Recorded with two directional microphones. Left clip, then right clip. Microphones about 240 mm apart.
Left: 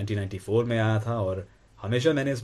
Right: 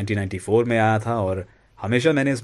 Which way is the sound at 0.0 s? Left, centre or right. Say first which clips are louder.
Right 6 dB; right.